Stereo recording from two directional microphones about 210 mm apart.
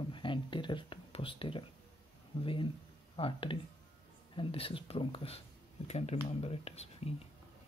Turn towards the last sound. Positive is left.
turn(degrees=30)  # may be behind; listen again after turning